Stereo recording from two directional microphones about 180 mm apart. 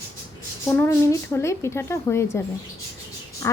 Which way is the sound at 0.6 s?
10° left (ahead or behind).